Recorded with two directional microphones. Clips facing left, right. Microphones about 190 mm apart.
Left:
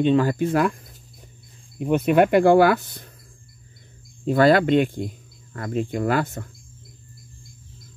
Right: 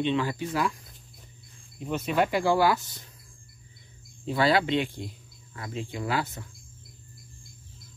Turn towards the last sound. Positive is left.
turn(degrees=50)  # may be behind; listen again after turning